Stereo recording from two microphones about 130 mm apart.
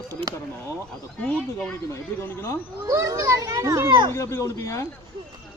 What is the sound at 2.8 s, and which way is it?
A child's voice, 25° right (ahead or behind).